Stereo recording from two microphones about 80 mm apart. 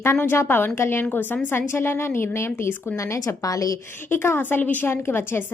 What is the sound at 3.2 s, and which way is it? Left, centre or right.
Speech, left.